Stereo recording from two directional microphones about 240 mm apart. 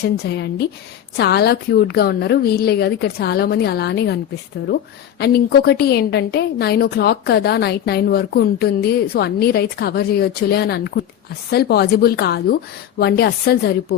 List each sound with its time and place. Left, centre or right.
0.3 s a woman's voice: left
5.2 s a woman's voice: left